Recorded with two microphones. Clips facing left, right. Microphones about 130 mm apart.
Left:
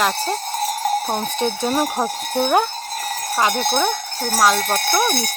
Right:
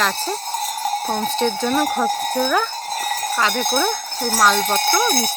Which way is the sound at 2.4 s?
35° left (ahead or behind).